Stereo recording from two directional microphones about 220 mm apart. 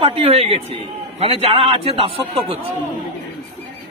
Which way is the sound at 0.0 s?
25° right (ahead or behind).